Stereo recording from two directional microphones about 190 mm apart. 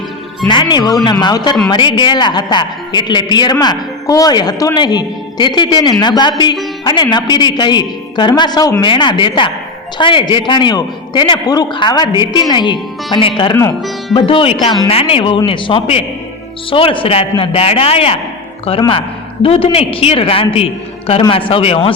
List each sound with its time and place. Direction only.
0.4 s a woman's voice: 25° left (ahead or behind)